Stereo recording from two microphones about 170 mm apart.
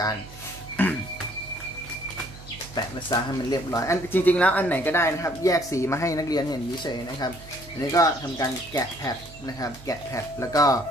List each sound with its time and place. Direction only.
0.8 s speech: 10° left (ahead or behind)
2.7 s speech: 25° left (ahead or behind)